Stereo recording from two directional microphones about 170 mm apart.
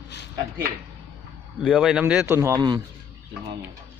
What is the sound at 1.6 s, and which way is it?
Speech, 5° right (ahead or behind).